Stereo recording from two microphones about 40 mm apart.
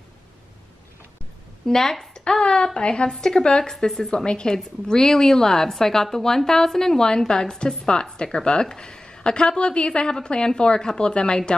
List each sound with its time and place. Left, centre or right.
1.7 s a woman's voice: centre
2.1 s a woman's voice: left
4.1 s a woman's voice: left